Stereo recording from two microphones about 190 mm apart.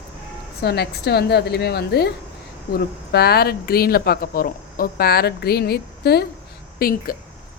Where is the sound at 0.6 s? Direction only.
60° left (ahead or behind).